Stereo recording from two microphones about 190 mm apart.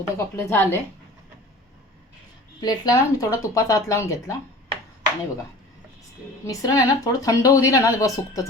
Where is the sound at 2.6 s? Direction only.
20° left (ahead or behind).